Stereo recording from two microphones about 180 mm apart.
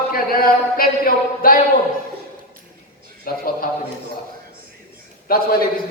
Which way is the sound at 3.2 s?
55° left (ahead or behind).